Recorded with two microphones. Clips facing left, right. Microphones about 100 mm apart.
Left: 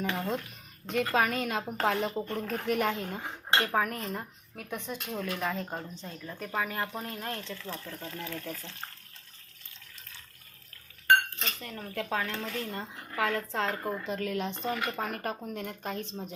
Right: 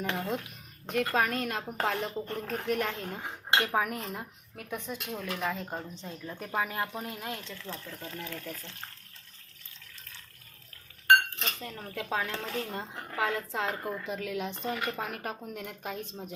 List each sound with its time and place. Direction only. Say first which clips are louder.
0.0 s speech: left 1 dB; centre (ahead or behind)
3.6 s speech: left 2 dB; 10° right (ahead or behind)
5.9 s a woman's voice: right 1 dB; 15° right (ahead or behind)
6.8 s a woman's voice: left 1 dB; 5° right (ahead or behind)
7.7 s speech: right 2 dB; 5° left (ahead or behind)
11.8 s a woman's voice: left 1 dB; 15° right (ahead or behind)